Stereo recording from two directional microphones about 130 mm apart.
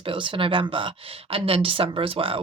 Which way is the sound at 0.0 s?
40° right (ahead or behind).